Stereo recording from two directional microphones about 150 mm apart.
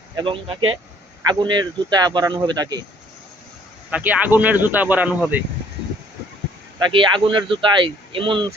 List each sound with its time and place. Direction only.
0.2 s speech: 35° right (ahead or behind)
3.9 s speech: 10° right (ahead or behind)
6.7 s speech: 30° right (ahead or behind)